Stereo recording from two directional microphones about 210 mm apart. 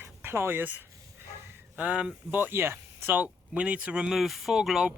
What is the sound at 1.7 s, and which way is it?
Speech, 5° right (ahead or behind).